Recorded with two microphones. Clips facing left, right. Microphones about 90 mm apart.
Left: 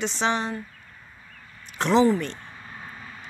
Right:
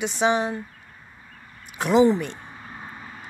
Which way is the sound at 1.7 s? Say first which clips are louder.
Right 2 dB; 10° right (ahead or behind).